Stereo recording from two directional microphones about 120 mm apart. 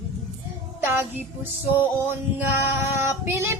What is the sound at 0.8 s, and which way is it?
Speech, 15° right (ahead or behind).